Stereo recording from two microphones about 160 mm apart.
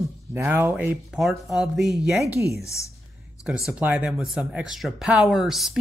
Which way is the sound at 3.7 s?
10° right (ahead or behind).